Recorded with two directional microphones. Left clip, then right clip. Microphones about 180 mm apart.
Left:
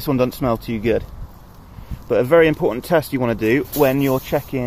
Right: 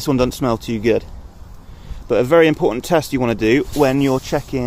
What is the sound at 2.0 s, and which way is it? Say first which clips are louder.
Speech: right 1 dB; 25° right (ahead or behind).